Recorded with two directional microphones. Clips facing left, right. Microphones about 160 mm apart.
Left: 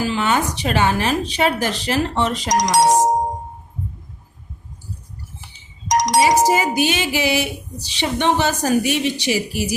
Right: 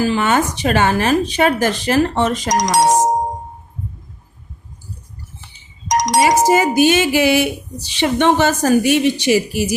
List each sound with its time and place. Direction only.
0.0 s speech: 50° right (ahead or behind)
5.9 s speech: 50° right (ahead or behind)